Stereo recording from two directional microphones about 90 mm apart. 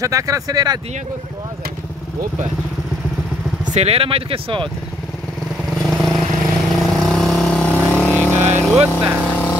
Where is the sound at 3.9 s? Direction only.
90° right.